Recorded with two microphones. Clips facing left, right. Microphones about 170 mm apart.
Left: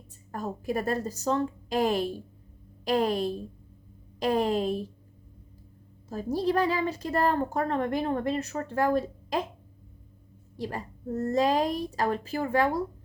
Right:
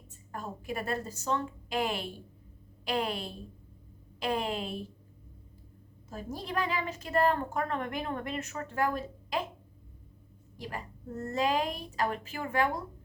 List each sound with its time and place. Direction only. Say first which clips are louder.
0.3 s a woman's voice: left 6 dB; 40° left (ahead or behind)
6.1 s a woman's voice: left 11 dB; 35° left (ahead or behind)
10.6 s a woman's voice: left 6 dB; 35° left (ahead or behind)